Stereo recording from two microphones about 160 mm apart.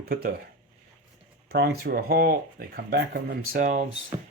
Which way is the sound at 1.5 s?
85° right.